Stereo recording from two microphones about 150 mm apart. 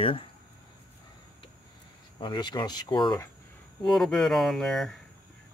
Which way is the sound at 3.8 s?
Centre (ahead or behind).